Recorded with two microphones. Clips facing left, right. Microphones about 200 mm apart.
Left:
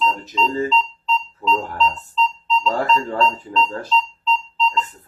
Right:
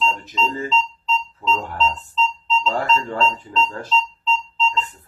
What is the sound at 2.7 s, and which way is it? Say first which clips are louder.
Speech: left 2 dB; 40° left (ahead or behind).